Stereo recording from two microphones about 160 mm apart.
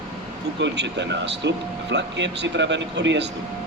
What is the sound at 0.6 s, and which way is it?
Speech, 90° right.